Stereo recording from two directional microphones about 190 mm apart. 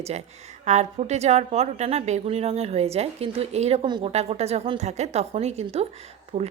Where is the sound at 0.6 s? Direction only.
35° right (ahead or behind).